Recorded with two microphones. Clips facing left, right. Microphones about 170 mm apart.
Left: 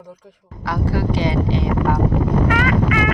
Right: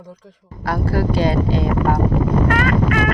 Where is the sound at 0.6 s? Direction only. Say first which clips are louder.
Right 1 dB; 50° right (ahead or behind).